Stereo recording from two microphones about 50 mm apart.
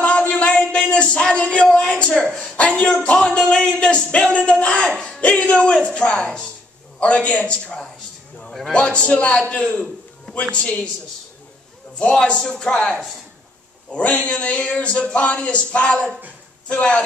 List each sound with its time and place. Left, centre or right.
0.3 s a sound: left
7.0 s speech: left
12.0 s a man's voice: centre
13.9 s speech: left